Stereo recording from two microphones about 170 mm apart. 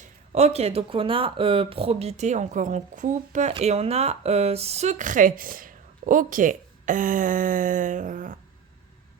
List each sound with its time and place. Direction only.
0.0 s speech: 40° right (ahead or behind)